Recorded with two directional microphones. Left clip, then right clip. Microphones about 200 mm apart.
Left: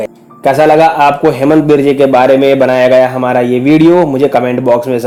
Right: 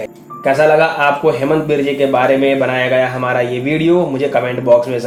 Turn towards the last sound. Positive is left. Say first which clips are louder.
# left 2 dB
turn(degrees=45)  # may be behind; listen again after turning